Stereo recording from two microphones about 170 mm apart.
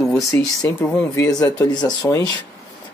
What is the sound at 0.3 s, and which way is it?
Speech, 20° left (ahead or behind).